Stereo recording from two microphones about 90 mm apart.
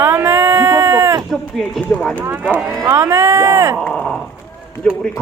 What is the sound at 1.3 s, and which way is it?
Speech, centre (ahead or behind).